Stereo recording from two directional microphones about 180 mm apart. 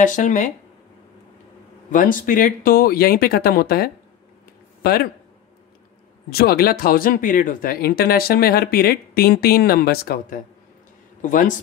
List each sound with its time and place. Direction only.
0.0 s speech: 45° left (ahead or behind)
1.9 s speech: 50° left (ahead or behind)
6.3 s speech: 60° left (ahead or behind)